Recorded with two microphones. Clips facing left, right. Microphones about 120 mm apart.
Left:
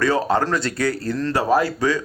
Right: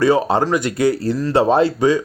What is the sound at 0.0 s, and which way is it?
Speech, 20° right (ahead or behind).